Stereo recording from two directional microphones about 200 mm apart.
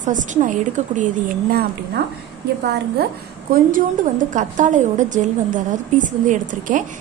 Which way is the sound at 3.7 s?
40° right (ahead or behind).